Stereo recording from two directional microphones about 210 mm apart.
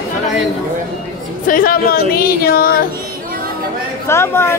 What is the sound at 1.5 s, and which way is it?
Speech, 45° left (ahead or behind).